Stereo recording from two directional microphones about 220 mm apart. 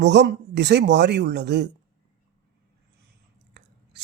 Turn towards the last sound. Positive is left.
turn(degrees=-50)  # may be behind; listen again after turning